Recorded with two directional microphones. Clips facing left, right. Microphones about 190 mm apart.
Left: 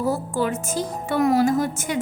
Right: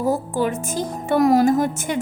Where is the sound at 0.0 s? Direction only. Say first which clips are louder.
Right 2 dB; 15° right (ahead or behind).